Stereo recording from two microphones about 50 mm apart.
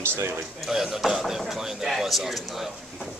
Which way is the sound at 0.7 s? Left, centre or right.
Centre.